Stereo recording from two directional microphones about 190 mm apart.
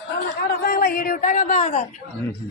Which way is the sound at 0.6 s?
50° left (ahead or behind).